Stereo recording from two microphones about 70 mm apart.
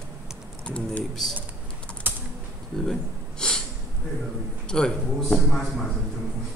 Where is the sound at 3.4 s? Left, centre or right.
Centre.